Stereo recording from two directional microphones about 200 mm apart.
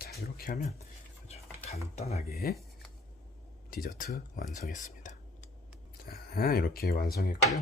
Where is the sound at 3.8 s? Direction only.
45° left (ahead or behind).